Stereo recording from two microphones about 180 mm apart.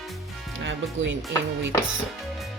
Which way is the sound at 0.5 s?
90° right.